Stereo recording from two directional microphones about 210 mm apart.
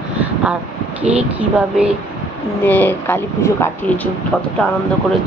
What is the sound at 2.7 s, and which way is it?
Speech, 10° left (ahead or behind).